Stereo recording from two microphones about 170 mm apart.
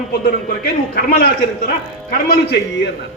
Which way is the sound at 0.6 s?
65° left (ahead or behind).